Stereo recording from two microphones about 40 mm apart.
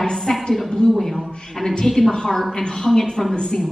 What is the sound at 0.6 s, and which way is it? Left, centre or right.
Speech, left.